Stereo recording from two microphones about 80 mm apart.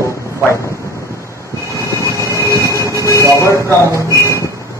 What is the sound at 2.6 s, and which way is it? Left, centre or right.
Train, left.